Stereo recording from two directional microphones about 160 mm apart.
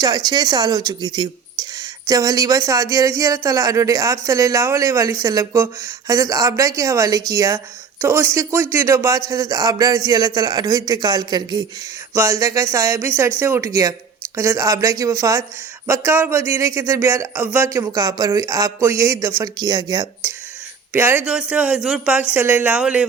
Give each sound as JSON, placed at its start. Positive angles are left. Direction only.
{"t": 0.0, "sound": "speech", "side_deg": -25}
{"t": 20.9, "sound": "a man's voice", "side_deg": -15}